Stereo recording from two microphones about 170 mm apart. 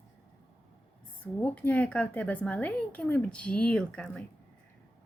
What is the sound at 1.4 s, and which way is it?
Speech, 10° left (ahead or behind).